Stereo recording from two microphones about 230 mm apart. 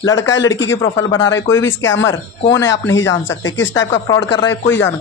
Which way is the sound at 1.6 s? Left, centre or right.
Left.